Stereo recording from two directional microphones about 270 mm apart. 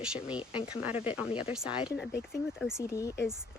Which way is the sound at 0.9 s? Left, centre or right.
Left.